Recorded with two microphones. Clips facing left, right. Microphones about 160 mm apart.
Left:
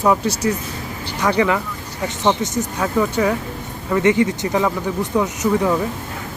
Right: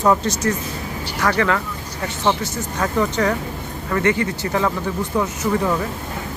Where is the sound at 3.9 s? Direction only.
20° left (ahead or behind).